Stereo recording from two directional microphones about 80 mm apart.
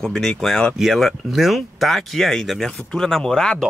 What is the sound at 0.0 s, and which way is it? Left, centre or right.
Speech, centre.